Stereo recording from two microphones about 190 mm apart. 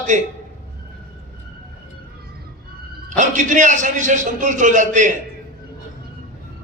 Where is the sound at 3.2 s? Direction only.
40° right (ahead or behind).